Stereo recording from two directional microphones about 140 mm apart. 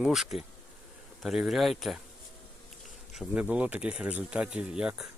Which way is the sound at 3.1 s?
5° right (ahead or behind).